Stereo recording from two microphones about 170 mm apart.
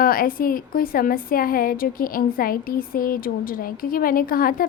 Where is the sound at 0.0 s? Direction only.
55° left (ahead or behind).